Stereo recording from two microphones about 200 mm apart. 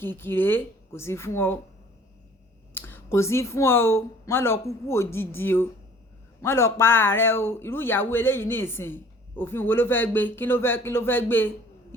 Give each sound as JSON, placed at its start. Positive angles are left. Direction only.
{"t": 0.0, "sound": "speech", "side_deg": 10}
{"t": 2.7, "sound": "speech", "side_deg": 10}